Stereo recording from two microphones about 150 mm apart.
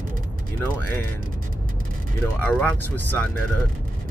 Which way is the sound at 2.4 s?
10° left (ahead or behind).